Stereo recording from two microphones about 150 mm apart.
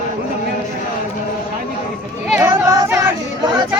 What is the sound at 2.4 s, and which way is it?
Music, 25° right (ahead or behind).